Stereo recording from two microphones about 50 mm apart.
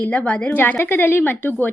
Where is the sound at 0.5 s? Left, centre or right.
Left.